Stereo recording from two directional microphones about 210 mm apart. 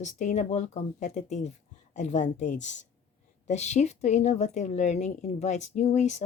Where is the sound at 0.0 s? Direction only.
35° left (ahead or behind).